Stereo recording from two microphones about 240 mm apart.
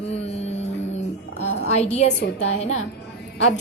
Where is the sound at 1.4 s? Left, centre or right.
Left.